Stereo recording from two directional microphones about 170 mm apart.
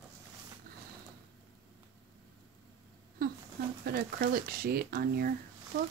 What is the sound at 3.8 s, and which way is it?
Speech, 65° right (ahead or behind).